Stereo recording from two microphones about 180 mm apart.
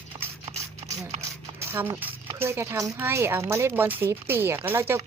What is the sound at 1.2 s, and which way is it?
Speech, 15° right (ahead or behind).